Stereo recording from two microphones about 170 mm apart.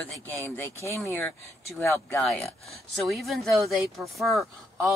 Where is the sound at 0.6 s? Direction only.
15° left (ahead or behind).